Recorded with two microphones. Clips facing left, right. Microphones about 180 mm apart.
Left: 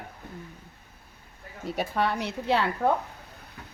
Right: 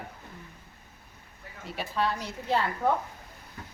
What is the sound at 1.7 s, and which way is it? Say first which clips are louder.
Speech: left 3 dB; 55° left (ahead or behind).